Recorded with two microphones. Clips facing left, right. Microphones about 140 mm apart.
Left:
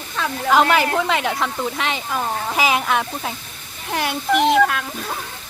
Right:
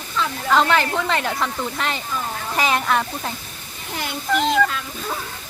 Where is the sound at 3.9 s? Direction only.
75° left (ahead or behind).